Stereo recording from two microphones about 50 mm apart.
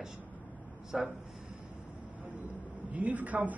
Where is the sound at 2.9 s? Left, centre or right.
Right.